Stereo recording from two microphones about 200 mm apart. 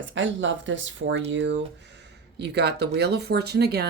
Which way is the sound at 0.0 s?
70° right (ahead or behind).